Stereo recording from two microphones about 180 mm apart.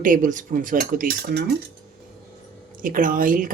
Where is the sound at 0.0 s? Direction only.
45° right (ahead or behind); by 1.5 s 65° right (ahead or behind).